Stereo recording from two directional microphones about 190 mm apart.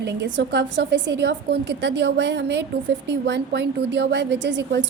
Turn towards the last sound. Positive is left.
turn(degrees=-65)  # may be behind; listen again after turning